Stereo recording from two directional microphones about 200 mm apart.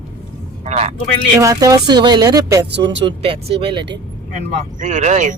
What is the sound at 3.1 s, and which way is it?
Speech, 30° right (ahead or behind).